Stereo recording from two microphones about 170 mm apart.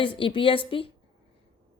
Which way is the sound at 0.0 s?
30° left (ahead or behind).